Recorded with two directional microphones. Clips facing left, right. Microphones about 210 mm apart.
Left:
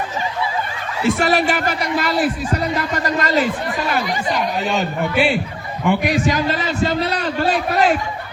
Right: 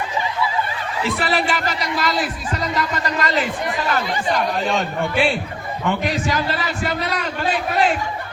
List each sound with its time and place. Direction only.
1.0 s a man's voice: 45° left (ahead or behind)
3.9 s a man's voice: 10° left (ahead or behind); by 7.9 s 40° left (ahead or behind)